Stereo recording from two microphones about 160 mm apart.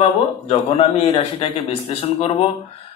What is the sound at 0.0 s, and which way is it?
Speech, 35° left (ahead or behind).